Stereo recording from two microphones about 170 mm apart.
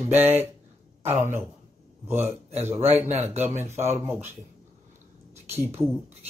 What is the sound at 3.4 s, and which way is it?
Speech, 15° right (ahead or behind).